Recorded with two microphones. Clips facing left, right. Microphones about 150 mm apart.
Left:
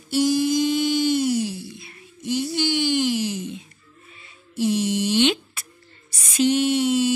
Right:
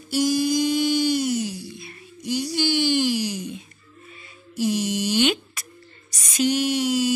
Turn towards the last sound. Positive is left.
turn(degrees=25)  # may be behind; listen again after turning